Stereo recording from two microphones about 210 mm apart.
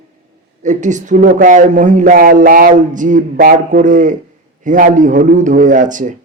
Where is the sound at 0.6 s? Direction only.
35° right (ahead or behind).